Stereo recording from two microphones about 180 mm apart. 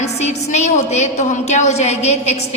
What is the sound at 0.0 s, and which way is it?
A woman's voice, 40° left (ahead or behind).